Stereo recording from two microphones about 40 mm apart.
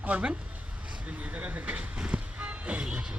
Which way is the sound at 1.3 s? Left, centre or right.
Right.